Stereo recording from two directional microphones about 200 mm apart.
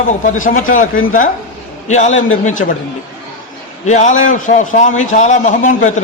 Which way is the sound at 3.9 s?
40° left (ahead or behind).